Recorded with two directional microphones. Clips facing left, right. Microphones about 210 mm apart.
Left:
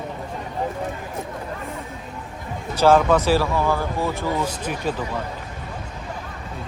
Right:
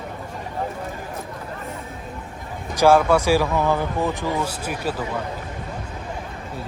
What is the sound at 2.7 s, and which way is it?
Speech, 15° right (ahead or behind).